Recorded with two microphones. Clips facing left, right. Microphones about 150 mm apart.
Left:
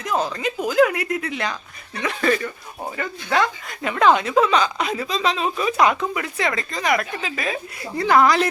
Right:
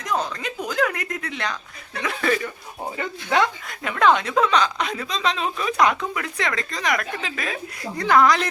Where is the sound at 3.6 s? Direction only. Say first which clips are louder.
Left 2 dB; centre (ahead or behind).